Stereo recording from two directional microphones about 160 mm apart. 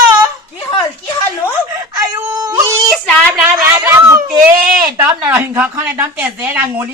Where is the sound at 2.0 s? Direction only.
20° right (ahead or behind).